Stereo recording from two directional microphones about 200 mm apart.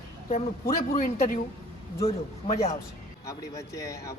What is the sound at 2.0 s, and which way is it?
Speech, 30° left (ahead or behind).